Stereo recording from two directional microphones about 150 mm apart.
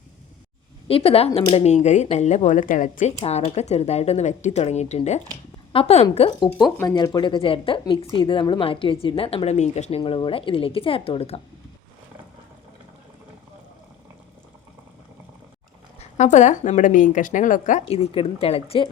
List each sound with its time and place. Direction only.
0.9 s a woman's voice: 40° left (ahead or behind)
10.0 s a woman's voice: 35° left (ahead or behind)
16.0 s speech: 55° left (ahead or behind)